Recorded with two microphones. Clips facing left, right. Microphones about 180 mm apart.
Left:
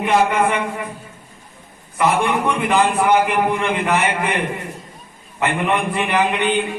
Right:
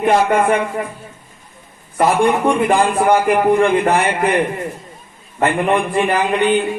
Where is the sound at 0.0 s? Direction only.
45° right (ahead or behind).